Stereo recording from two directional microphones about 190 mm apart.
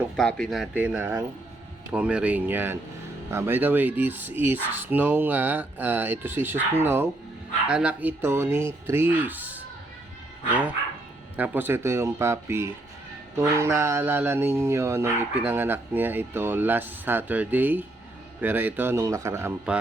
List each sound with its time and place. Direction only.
0.2 s speech: 5° left (ahead or behind)
10.5 s speech: 10° right (ahead or behind)